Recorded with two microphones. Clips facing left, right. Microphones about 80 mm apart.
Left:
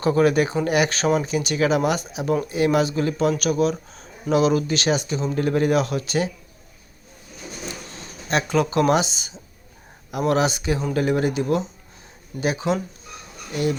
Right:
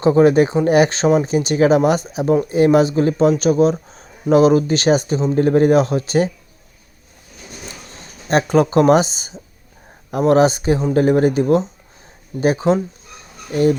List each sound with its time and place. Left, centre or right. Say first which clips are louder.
0.0 s speech: right 6 dB; right
8.3 s speech: right 6 dB; right